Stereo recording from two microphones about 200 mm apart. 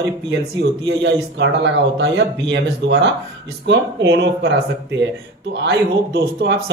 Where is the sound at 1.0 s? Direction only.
60° right (ahead or behind).